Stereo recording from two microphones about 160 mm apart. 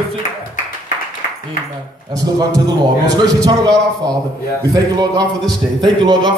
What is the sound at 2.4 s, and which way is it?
A man's voice, 25° right (ahead or behind).